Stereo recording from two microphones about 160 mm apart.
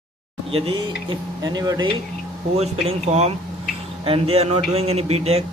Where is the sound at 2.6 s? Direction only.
40° right (ahead or behind).